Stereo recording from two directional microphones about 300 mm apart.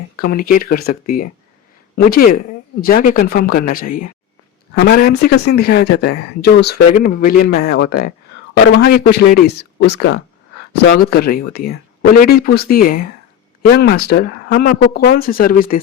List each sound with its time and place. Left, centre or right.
0.2 s speech: left